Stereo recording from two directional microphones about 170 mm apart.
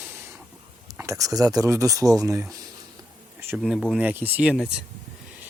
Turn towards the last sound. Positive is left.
turn(degrees=5)  # may be behind; listen again after turning